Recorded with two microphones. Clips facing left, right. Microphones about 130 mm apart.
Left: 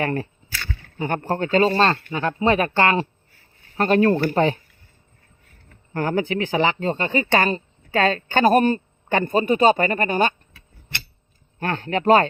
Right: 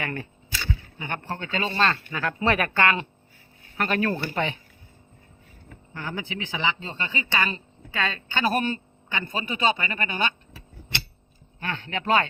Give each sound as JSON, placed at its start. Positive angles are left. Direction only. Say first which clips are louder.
{"t": 0.0, "sound": "speech", "louder": "left 8 dB", "side_deg": 35}
{"t": 5.9, "sound": "speech", "louder": "left 11 dB", "side_deg": 50}
{"t": 11.6, "sound": "speech", "louder": "left 9 dB", "side_deg": 45}